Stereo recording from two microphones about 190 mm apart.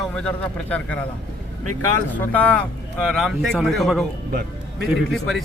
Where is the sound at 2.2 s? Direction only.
10° left (ahead or behind).